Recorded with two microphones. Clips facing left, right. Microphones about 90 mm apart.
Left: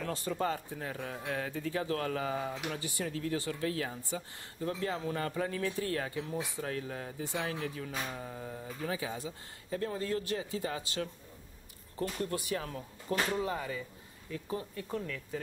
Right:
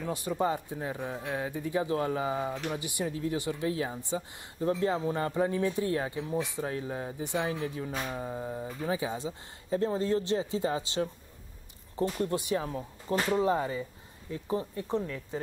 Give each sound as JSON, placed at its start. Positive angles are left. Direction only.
{"t": 0.0, "sound": "speech", "side_deg": -15}